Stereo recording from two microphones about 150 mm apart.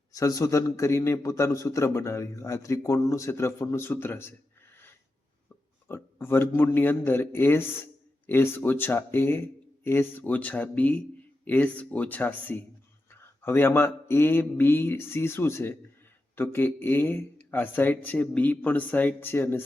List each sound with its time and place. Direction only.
0.1 s a man's voice: 20° left (ahead or behind)
5.9 s a man's voice: 15° left (ahead or behind)